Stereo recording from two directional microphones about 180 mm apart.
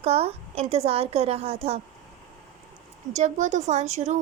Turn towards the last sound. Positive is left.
turn(degrees=-40)  # may be behind; listen again after turning